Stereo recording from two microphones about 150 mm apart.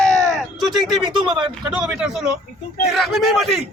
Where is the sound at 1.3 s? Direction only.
30° right (ahead or behind).